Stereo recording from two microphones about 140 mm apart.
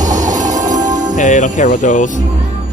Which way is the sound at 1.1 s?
65° left (ahead or behind).